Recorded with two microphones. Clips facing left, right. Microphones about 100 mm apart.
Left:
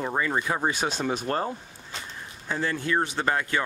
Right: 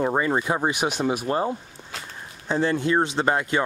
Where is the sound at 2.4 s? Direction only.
25° right (ahead or behind).